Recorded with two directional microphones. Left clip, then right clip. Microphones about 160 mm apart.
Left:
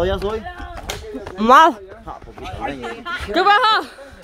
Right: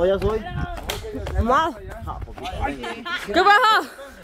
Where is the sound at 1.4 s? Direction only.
75° left (ahead or behind).